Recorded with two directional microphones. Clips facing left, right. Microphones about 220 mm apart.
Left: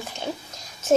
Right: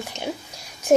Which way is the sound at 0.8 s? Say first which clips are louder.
Right 2 dB; 15° right (ahead or behind).